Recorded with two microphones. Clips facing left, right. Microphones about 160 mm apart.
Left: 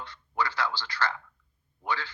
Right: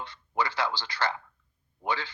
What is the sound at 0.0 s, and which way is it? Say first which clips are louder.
Speech: right 1 dB; 15° right (ahead or behind).